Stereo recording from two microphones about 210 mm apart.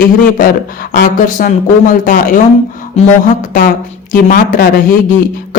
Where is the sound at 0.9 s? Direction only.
40° left (ahead or behind).